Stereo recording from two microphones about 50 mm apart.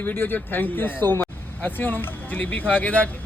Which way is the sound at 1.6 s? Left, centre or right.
Left.